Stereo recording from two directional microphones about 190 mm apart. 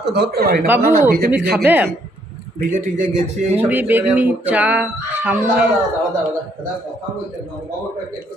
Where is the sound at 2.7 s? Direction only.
40° right (ahead or behind).